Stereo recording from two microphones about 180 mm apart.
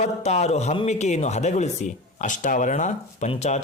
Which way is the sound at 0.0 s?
40° left (ahead or behind).